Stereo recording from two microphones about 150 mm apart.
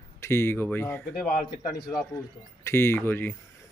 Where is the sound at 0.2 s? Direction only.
15° left (ahead or behind).